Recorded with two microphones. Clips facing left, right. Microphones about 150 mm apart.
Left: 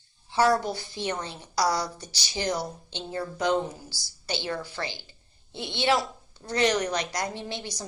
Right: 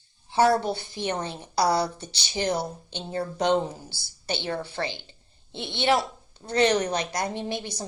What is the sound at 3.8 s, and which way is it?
Speech, 60° right (ahead or behind).